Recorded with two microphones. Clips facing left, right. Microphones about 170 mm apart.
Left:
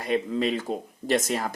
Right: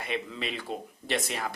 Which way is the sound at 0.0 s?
40° left (ahead or behind).